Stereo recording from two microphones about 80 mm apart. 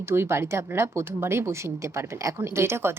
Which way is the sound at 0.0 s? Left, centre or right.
Right.